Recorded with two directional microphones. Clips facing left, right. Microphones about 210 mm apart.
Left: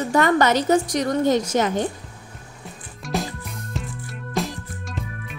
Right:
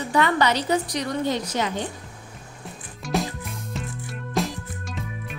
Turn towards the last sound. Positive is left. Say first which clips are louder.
# left 1 dB
turn(degrees=0)  # may be behind; listen again after turning